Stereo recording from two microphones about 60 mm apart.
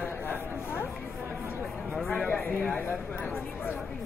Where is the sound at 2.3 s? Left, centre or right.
Left.